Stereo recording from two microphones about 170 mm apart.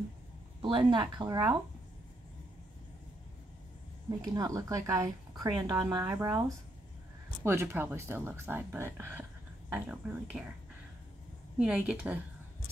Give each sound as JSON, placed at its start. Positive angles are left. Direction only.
{"t": 0.6, "sound": "speech", "side_deg": -30}
{"t": 4.2, "sound": "speech", "side_deg": -20}
{"t": 7.4, "sound": "speech", "side_deg": -15}
{"t": 11.5, "sound": "speech", "side_deg": -5}